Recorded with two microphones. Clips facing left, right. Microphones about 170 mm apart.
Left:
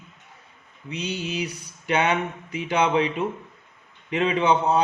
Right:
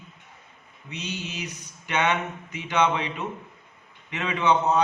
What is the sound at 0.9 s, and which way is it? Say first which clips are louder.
Speech: left 5 dB; 35° left (ahead or behind).